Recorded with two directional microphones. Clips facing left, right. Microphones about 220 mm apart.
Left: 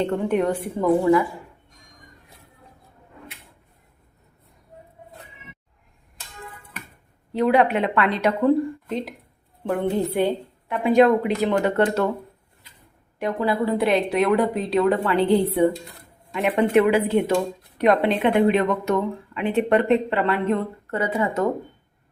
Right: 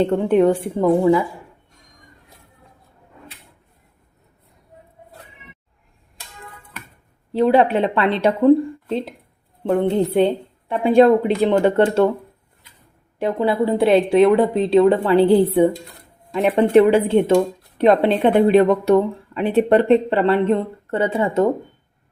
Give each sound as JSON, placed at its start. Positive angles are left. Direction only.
{"t": 0.0, "sound": "a woman's voice", "side_deg": -30}
{"t": 7.3, "sound": "a woman's voice", "side_deg": -30}
{"t": 13.1, "sound": "a woman's voice", "side_deg": -25}
{"t": 16.3, "sound": "a woman's voice", "side_deg": -35}